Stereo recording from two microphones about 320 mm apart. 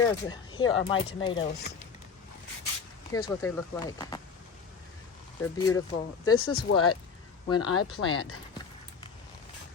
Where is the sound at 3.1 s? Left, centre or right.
Centre.